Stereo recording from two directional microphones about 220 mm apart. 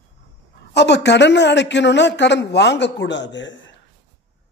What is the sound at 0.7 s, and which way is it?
A man's voice, 50° left (ahead or behind).